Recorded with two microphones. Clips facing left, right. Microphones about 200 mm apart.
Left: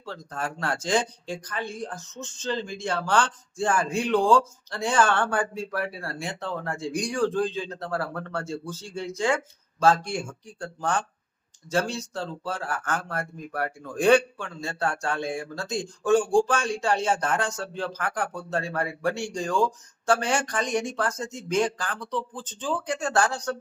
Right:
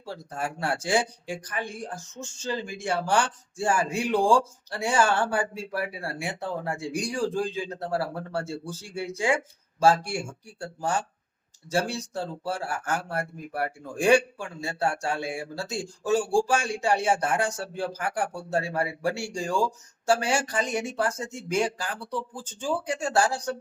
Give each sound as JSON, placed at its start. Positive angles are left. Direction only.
{"t": 0.0, "sound": "speech", "side_deg": -10}
{"t": 11.7, "sound": "speech", "side_deg": -15}